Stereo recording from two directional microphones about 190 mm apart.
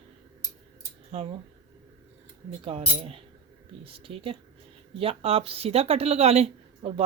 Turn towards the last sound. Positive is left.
turn(degrees=-30)  # may be behind; listen again after turning